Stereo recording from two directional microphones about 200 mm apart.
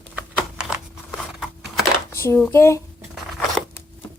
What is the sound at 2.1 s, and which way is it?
Speech, 10° left (ahead or behind).